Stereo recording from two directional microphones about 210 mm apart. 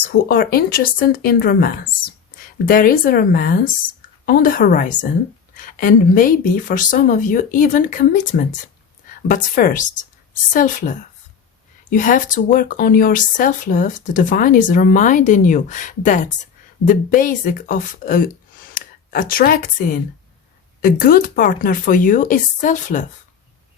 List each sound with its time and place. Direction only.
0.0 s speech: 45° left (ahead or behind)